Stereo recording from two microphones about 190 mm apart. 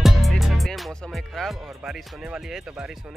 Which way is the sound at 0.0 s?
Centre (ahead or behind).